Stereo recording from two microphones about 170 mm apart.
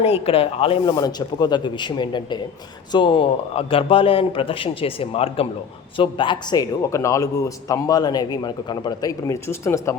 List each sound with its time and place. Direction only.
0.0 s a man's voice: 35° left (ahead or behind); by 9.9 s 15° left (ahead or behind)